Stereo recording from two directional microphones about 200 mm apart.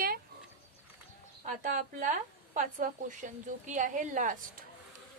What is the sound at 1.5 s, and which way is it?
A woman's voice, 40° right (ahead or behind).